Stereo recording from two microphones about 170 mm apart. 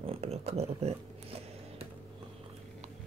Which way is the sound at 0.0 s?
35° right (ahead or behind).